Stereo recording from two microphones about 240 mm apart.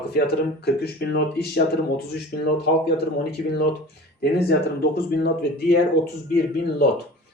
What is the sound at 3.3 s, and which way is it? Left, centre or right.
Speech, left.